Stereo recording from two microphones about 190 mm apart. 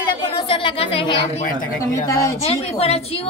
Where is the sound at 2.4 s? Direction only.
30° left (ahead or behind).